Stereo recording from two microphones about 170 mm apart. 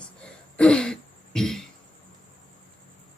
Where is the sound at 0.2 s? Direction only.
5° left (ahead or behind).